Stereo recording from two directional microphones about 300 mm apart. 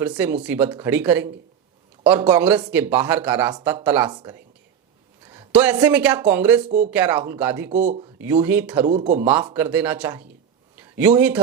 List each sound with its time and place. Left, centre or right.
0.2 s speech: centre
6.7 s speech: right
6.9 s speech: centre
7.7 s speech: right
8.2 s speech: centre
8.9 s speech: right
9.5 s speech: centre
10.8 s a sound: centre